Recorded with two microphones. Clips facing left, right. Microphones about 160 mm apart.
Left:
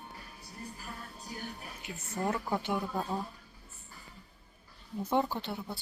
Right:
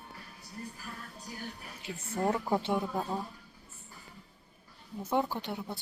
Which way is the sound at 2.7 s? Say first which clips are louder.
Right 1 dB; 10° right (ahead or behind).